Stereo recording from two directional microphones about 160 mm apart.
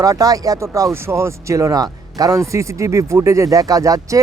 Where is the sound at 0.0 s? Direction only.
20° right (ahead or behind).